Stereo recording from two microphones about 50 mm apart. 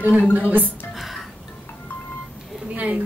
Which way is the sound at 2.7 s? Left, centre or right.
Right.